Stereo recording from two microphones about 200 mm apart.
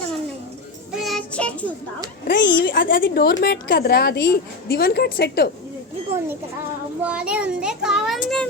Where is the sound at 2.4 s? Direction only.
65° left (ahead or behind).